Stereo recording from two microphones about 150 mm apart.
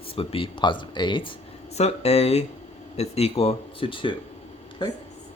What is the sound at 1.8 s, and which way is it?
Speech, 45° left (ahead or behind).